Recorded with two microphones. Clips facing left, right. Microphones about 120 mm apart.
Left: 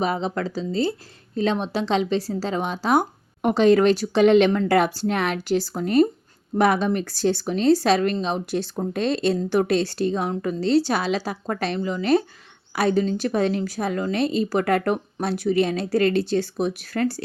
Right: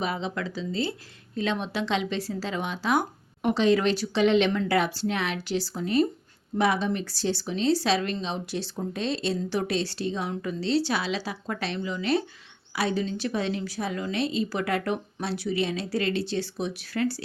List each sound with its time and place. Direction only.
0.0 s speech: 40° left (ahead or behind)